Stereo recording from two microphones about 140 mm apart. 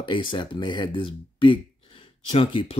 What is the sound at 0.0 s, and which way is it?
Speech, 35° left (ahead or behind).